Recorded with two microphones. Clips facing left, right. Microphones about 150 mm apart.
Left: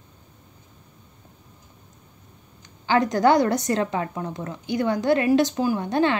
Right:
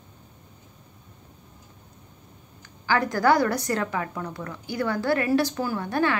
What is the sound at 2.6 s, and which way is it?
A woman's voice, 20° left (ahead or behind).